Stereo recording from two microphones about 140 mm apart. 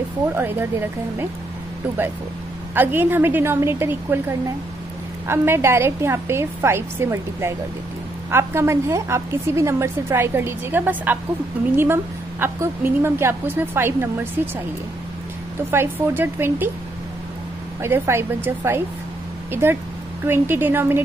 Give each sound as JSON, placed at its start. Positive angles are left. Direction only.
{"t": 0.3, "sound": "a woman's voice", "side_deg": -15}
{"t": 2.7, "sound": "a woman's voice", "side_deg": -15}
{"t": 15.7, "sound": "a woman's voice", "side_deg": -15}
{"t": 17.8, "sound": "a woman's voice", "side_deg": -15}